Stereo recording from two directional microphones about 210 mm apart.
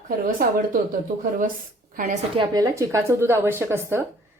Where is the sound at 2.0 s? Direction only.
40° right (ahead or behind).